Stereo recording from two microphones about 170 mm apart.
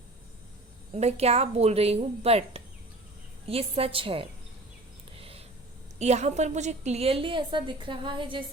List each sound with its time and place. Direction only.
0.9 s a woman's voice: 40° right (ahead or behind)
5.1 s a sound: 35° right (ahead or behind)
6.0 s a woman's voice: 40° right (ahead or behind)